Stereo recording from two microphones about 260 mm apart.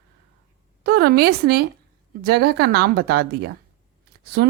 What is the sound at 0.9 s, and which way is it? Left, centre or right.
A woman's voice, right.